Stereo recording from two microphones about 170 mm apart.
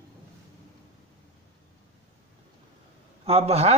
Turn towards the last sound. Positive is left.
turn(degrees=-40)  # may be behind; listen again after turning